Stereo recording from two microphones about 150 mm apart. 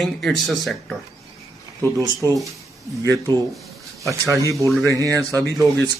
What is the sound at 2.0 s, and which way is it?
Speech, 20° right (ahead or behind).